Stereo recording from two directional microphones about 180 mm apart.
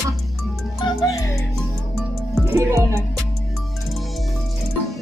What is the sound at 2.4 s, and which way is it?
Speech, 15° right (ahead or behind).